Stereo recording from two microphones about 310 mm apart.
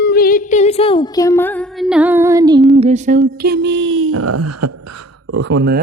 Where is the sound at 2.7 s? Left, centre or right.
Right.